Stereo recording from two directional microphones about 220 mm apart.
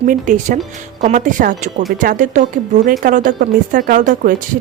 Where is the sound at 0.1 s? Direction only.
35° right (ahead or behind).